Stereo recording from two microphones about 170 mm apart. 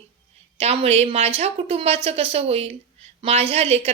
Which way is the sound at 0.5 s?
35° right (ahead or behind).